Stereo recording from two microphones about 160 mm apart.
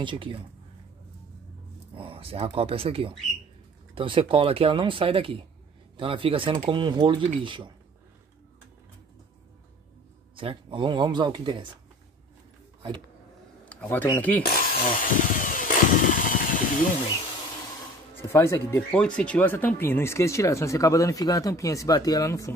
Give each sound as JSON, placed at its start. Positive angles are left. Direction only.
{"t": 0.0, "sound": "speech", "side_deg": -30}
{"t": 2.0, "sound": "speech", "side_deg": -35}
{"t": 10.3, "sound": "speech", "side_deg": -35}
{"t": 13.7, "sound": "a sound", "side_deg": 10}
{"t": 14.1, "sound": "speech", "side_deg": 10}
{"t": 14.4, "sound": "drill", "side_deg": 65}
{"t": 16.3, "sound": "a sound", "side_deg": 55}
{"t": 18.3, "sound": "speech", "side_deg": 15}